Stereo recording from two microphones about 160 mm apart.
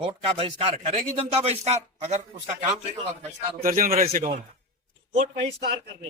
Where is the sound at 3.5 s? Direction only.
60° right (ahead or behind).